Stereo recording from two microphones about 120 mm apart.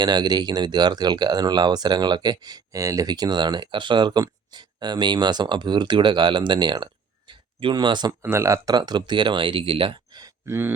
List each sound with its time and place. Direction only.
0.0 s speech: 35° right (ahead or behind)
7.3 s a sound: 40° right (ahead or behind)
8.2 s speech: 20° right (ahead or behind)
8.7 s speech: 35° right (ahead or behind)
10.4 s speech: 20° right (ahead or behind)